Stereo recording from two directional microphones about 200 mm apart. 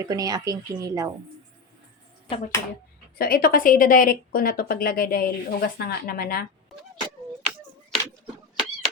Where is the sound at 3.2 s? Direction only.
45° left (ahead or behind).